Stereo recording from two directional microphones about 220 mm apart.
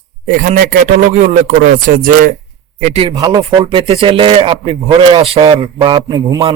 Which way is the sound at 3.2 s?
15° right (ahead or behind).